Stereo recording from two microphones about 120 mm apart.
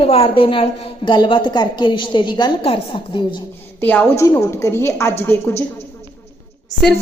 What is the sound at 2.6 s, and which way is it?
Speech, 50° left (ahead or behind).